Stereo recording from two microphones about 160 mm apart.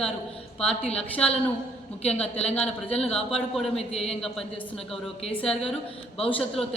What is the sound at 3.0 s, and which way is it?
Speech, 5° left (ahead or behind).